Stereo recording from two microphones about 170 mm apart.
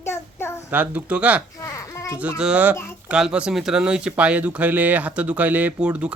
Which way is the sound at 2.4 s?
5° right (ahead or behind).